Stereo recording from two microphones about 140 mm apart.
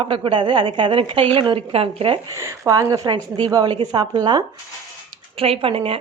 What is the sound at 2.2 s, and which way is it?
A woman's voice, 20° right (ahead or behind).